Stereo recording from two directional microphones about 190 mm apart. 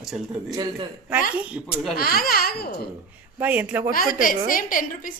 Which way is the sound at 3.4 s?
10° right (ahead or behind).